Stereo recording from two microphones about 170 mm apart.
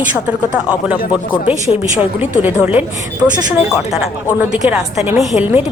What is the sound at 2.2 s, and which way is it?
Speech, 10° right (ahead or behind).